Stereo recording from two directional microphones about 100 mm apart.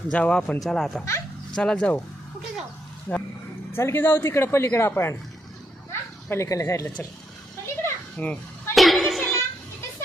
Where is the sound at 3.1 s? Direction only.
20° left (ahead or behind).